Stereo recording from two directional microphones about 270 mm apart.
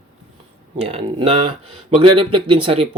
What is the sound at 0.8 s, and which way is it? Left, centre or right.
Speech, right.